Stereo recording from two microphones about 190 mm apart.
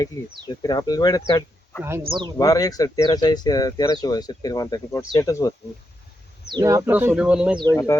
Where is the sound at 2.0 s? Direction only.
25° right (ahead or behind).